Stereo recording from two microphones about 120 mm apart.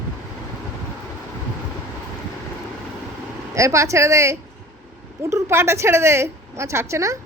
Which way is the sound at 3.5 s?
25° right (ahead or behind).